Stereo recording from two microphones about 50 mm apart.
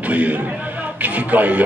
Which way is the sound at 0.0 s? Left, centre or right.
Right.